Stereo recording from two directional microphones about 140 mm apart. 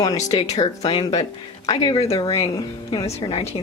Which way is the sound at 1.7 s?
35° left (ahead or behind).